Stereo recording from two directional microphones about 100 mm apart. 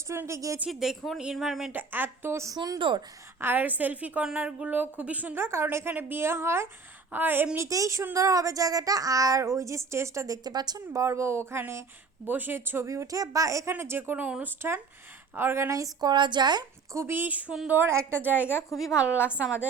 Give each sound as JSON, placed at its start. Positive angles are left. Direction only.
{"t": 0.1, "sound": "speech", "side_deg": -30}
{"t": 0.7, "sound": "speech", "side_deg": 0}
{"t": 1.7, "sound": "speech", "side_deg": -20}
{"t": 2.6, "sound": "a woman's voice", "side_deg": -50}
{"t": 3.4, "sound": "a woman's voice", "side_deg": -20}
{"t": 7.5, "sound": "speech", "side_deg": -30}
{"t": 15.4, "sound": "a woman's voice", "side_deg": -25}
{"t": 16.9, "sound": "a woman's voice", "side_deg": -25}
{"t": 18.4, "sound": "a woman's voice", "side_deg": 25}